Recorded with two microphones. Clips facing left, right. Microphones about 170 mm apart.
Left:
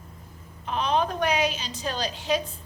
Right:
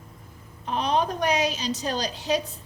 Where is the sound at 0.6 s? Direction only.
35° right (ahead or behind).